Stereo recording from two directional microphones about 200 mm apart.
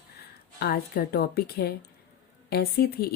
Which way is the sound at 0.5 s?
50° left (ahead or behind).